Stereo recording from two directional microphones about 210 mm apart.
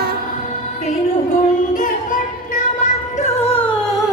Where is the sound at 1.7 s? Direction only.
40° left (ahead or behind).